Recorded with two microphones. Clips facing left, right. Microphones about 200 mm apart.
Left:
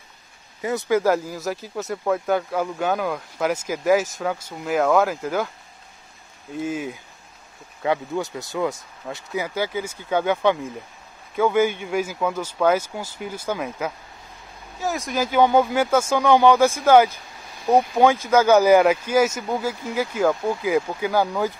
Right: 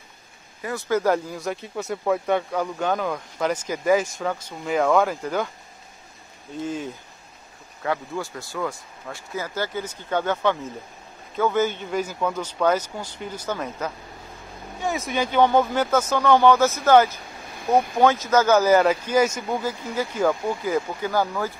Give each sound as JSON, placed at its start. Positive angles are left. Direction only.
{"t": 0.6, "sound": "speech", "side_deg": 20}
{"t": 0.9, "sound": "speech", "side_deg": 5}
{"t": 6.6, "sound": "speech", "side_deg": 10}
{"t": 7.8, "sound": "speech", "side_deg": 20}